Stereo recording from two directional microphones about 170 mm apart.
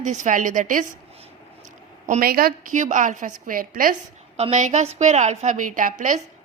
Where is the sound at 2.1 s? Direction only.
60° right (ahead or behind).